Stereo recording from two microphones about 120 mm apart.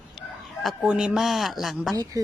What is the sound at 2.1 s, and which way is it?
Speech, 30° right (ahead or behind).